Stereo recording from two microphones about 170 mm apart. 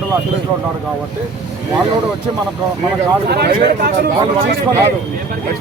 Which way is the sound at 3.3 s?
70° right (ahead or behind).